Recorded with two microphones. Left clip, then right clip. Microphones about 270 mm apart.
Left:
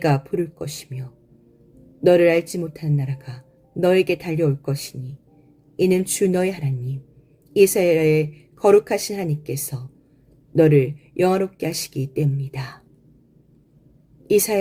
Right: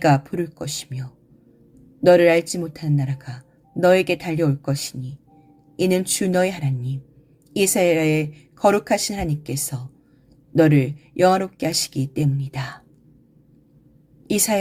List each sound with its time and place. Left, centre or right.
0.0 s speech: right
2.0 s speech: right
10.6 s speech: right
14.3 s speech: right